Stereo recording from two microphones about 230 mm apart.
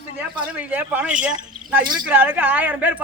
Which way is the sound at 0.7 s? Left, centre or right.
Centre.